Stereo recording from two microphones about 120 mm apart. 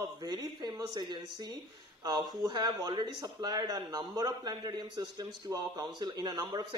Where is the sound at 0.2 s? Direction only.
35° right (ahead or behind).